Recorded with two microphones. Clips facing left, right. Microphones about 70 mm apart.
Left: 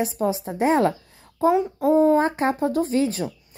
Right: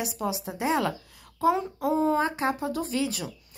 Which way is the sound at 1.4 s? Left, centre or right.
Left.